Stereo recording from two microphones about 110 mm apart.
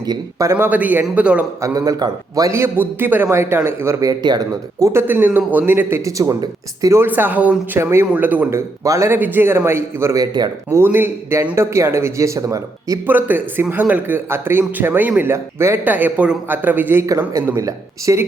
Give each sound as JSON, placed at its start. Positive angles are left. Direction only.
{"t": 0.0, "sound": "a man's voice", "side_deg": -30}
{"t": 0.5, "sound": "a man's voice", "side_deg": -15}
{"t": 1.6, "sound": "speech", "side_deg": -30}
{"t": 4.9, "sound": "speech", "side_deg": -20}
{"t": 7.0, "sound": "speech", "side_deg": -15}
{"t": 13.1, "sound": "a man's voice", "side_deg": -15}